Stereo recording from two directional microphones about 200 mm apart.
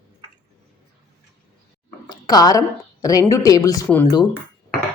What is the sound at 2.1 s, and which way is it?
A woman's voice, 20° left (ahead or behind).